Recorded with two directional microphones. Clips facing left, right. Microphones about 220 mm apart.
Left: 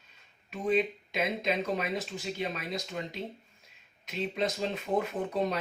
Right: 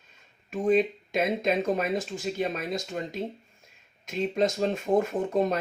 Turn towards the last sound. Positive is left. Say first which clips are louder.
# right 5 dB
turn(degrees=-45)  # may be behind; listen again after turning